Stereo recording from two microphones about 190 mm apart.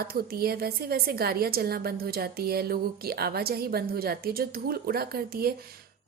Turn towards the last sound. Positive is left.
turn(degrees=-55)  # may be behind; listen again after turning